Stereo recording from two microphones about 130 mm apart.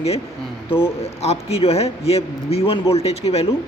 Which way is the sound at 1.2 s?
55° left (ahead or behind).